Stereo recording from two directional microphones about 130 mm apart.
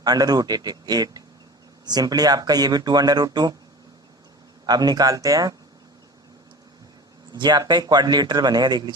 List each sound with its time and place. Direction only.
0.0 s speech: 30° right (ahead or behind)
4.6 s speech: 30° right (ahead or behind)
7.3 s speech: 35° right (ahead or behind)